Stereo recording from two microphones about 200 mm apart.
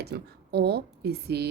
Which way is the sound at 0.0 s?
55° right (ahead or behind).